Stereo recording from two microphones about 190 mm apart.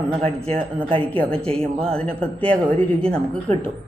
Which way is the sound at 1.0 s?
5° left (ahead or behind).